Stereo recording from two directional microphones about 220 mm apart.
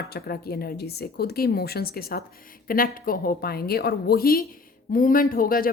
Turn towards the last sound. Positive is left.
turn(degrees=40)  # may be behind; listen again after turning